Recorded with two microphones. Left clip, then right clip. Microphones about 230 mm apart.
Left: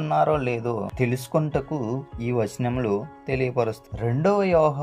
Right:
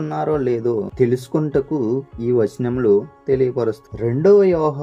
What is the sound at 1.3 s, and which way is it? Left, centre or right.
Speech, left.